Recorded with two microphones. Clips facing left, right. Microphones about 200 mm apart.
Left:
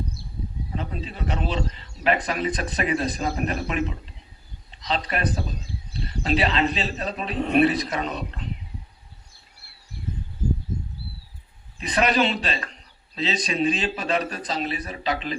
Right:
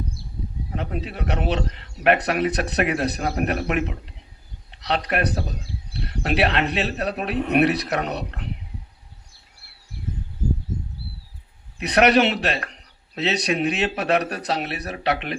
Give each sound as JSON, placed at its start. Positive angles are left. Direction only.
{"t": 0.8, "sound": "speech", "side_deg": -70}
{"t": 11.8, "sound": "speech", "side_deg": -70}